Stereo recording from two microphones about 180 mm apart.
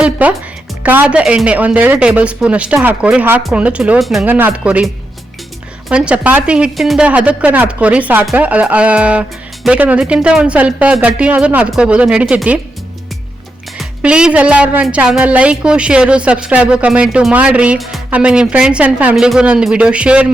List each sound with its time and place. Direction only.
0.0 s a woman's voice: 5° right (ahead or behind)
5.9 s a woman's voice: 5° right (ahead or behind)
13.7 s a woman's voice: 5° right (ahead or behind)